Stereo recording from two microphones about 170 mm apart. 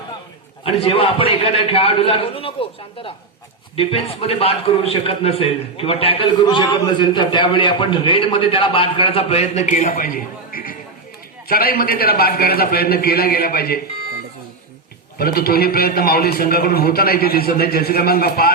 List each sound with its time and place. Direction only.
0.6 s a man's voice: 35° left (ahead or behind); by 13.7 s 65° left (ahead or behind)
15.2 s a man's voice: 65° left (ahead or behind)